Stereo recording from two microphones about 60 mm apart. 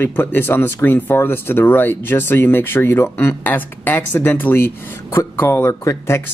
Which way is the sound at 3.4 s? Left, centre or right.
Left.